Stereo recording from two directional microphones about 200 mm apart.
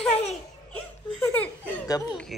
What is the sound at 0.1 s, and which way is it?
Baby laughter, 35° left (ahead or behind).